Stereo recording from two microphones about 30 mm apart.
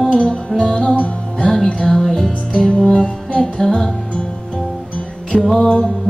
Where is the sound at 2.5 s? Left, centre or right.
Left.